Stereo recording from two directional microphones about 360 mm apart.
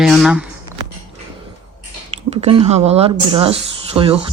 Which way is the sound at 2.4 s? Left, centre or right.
Centre.